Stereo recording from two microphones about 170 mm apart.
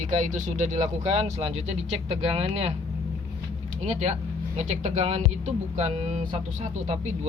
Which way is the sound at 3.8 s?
40° right (ahead or behind).